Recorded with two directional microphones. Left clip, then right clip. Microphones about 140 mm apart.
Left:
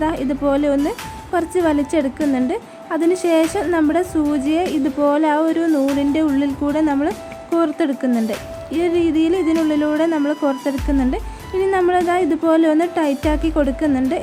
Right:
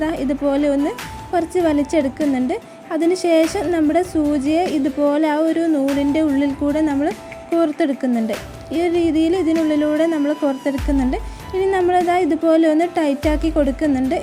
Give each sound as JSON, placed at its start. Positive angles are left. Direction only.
{"t": 0.0, "sound": "speech", "side_deg": -20}